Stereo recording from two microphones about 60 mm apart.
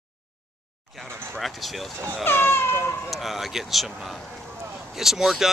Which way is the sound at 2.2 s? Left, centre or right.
Left.